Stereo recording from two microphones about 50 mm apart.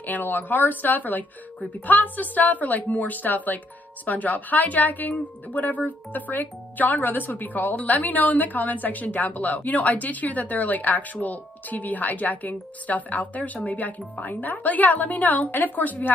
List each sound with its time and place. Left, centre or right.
0.0 s speech: left